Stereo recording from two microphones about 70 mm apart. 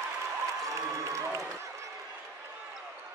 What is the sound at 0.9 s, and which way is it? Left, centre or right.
Applause, right.